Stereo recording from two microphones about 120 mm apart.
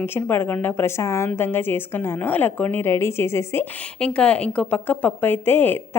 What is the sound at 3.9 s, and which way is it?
A woman's voice, 10° left (ahead or behind).